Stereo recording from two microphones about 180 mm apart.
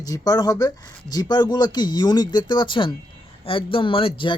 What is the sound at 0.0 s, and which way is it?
Speech, 20° left (ahead or behind).